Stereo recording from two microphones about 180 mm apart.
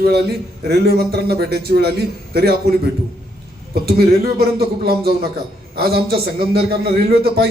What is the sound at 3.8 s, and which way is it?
A man's voice, 60° right (ahead or behind).